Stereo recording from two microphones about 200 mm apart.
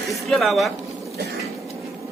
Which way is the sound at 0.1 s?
Centre (ahead or behind).